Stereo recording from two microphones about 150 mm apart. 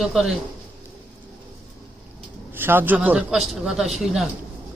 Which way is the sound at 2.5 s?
15° right (ahead or behind).